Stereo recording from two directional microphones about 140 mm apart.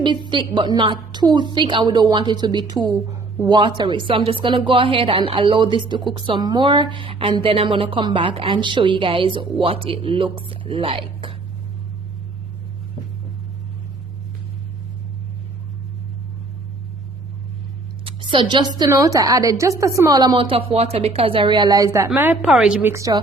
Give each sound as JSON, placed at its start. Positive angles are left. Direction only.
{"t": 0.0, "sound": "a woman's voice", "side_deg": -35}
{"t": 18.0, "sound": "a sound", "side_deg": -35}
{"t": 18.8, "sound": "a woman's voice", "side_deg": -25}
{"t": 21.9, "sound": "a woman's voice", "side_deg": -15}
{"t": 22.9, "sound": "a woman's voice", "side_deg": -25}